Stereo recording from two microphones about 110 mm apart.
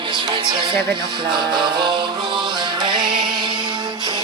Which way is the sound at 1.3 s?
45° right (ahead or behind).